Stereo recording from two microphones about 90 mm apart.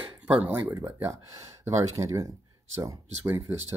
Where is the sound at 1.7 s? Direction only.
35° right (ahead or behind).